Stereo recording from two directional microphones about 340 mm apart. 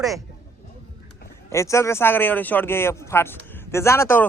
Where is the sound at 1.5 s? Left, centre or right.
Centre.